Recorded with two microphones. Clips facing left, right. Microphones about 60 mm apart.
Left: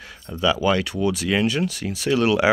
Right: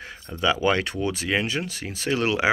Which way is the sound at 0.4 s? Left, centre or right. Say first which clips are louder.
Left 2 dB; right.